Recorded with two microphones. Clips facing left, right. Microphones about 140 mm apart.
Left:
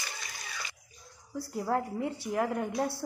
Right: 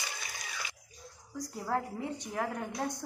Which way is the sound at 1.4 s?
5° left (ahead or behind).